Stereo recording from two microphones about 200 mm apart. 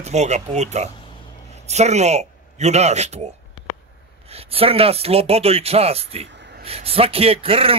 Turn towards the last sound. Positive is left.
turn(degrees=-30)  # may be behind; listen again after turning